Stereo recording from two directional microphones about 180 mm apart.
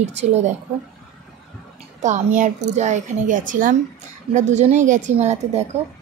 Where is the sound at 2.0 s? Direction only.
40° right (ahead or behind).